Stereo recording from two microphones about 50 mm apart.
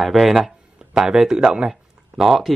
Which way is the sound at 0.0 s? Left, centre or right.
Centre.